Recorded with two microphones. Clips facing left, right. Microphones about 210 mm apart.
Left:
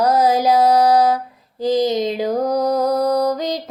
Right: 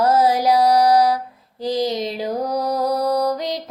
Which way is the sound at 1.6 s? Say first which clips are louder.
Left 4 dB; 20° left (ahead or behind).